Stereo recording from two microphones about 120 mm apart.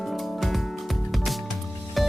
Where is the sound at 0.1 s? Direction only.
Centre (ahead or behind).